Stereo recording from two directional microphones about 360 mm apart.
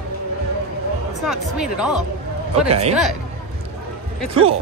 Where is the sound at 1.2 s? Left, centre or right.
Centre.